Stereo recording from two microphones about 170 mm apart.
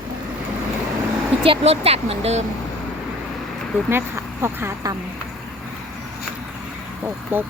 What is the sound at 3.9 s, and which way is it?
Speech, 15° right (ahead or behind).